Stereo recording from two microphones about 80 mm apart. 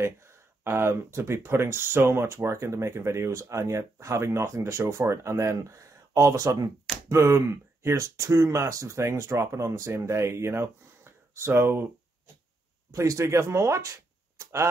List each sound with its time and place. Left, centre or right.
0.0 s speech: right
12.9 s speech: right
14.4 s a sound: right